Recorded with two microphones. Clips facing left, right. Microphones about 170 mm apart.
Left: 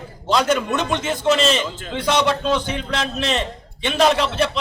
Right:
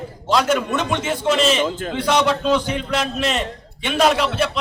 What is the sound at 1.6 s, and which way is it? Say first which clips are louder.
Speech: right 7 dB; 55° right (ahead or behind).